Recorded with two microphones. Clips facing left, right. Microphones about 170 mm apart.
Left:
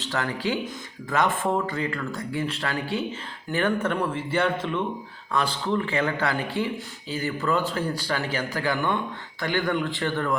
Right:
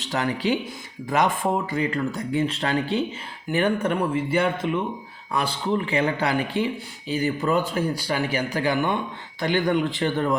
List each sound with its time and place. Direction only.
0.0 s a man's voice: 15° right (ahead or behind)